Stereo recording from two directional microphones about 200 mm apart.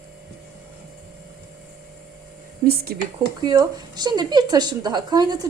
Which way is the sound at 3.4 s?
20° right (ahead or behind).